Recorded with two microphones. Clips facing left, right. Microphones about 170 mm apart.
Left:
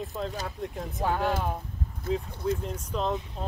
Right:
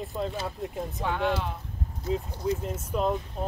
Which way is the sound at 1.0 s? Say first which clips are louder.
Left 1 dB; 40° left (ahead or behind).